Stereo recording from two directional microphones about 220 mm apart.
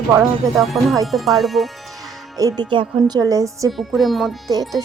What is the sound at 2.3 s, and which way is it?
Speech, 15° right (ahead or behind).